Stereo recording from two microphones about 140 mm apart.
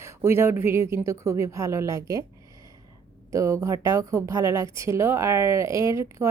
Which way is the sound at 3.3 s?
25° right (ahead or behind).